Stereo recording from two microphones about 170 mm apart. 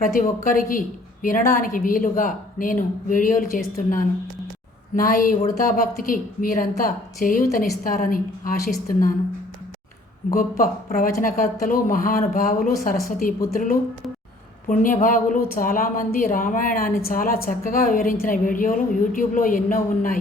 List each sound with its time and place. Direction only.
0.0 s a woman's voice: 55° left (ahead or behind)
10.3 s speech: 55° left (ahead or behind)